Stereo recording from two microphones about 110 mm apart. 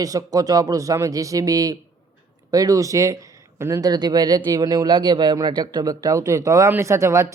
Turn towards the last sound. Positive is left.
turn(degrees=-25)  # may be behind; listen again after turning